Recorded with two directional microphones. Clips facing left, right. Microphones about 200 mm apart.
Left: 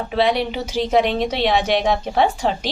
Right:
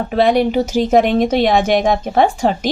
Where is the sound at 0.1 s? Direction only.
45° right (ahead or behind).